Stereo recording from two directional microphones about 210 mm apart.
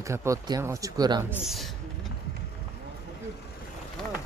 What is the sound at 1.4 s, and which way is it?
Speech, centre (ahead or behind).